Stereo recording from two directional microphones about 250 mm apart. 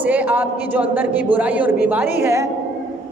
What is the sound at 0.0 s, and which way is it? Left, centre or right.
A man's voice, centre.